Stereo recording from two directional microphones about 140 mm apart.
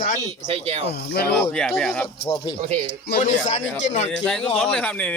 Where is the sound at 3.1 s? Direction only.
65° left (ahead or behind).